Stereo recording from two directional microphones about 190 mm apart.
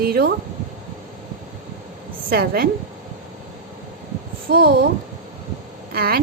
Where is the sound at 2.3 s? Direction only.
50° right (ahead or behind).